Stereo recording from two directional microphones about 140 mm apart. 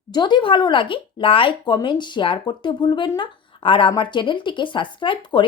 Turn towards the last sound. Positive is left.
turn(degrees=35)  # may be behind; listen again after turning